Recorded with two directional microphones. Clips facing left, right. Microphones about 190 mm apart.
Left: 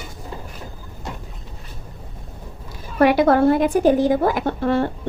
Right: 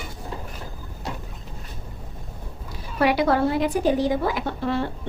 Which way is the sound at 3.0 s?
50° left (ahead or behind).